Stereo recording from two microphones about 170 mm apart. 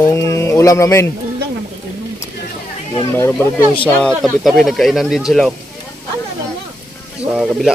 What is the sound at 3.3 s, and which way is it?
Speech, 5° left (ahead or behind).